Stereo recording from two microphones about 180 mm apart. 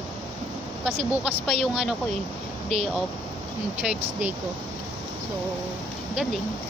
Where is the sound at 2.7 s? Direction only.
35° right (ahead or behind).